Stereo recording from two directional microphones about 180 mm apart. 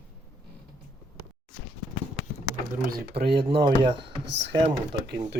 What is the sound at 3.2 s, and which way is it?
Speech, 65° right (ahead or behind).